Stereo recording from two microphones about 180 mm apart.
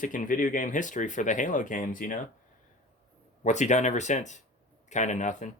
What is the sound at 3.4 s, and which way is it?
Speech, 40° left (ahead or behind).